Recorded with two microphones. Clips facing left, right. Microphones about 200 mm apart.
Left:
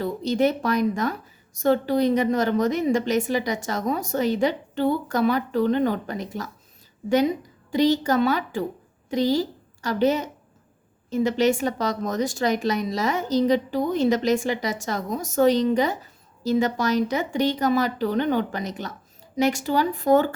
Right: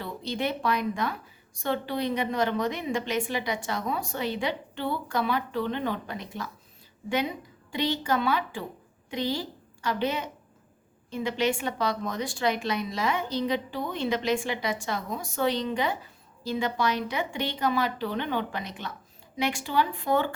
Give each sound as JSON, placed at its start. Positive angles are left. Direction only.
{"t": 0.0, "sound": "a woman's voice", "side_deg": 40}